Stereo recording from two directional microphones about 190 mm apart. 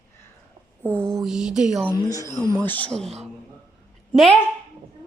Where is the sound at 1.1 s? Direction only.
Centre (ahead or behind).